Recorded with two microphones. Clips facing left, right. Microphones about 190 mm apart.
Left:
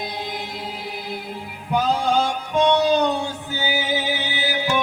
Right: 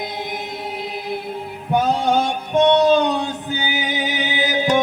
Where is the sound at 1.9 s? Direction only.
25° right (ahead or behind).